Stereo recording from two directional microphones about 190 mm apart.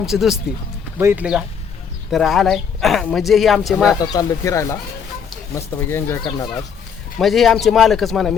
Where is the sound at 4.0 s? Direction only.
20° left (ahead or behind).